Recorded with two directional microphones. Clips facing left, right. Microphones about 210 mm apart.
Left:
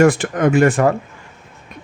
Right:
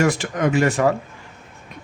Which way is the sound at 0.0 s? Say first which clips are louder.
Left 6 dB; 55° left (ahead or behind).